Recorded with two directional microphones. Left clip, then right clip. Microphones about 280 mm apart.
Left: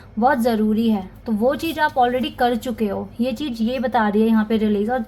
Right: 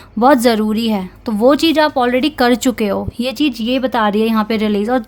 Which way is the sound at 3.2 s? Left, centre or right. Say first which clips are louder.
Right 4 dB; right.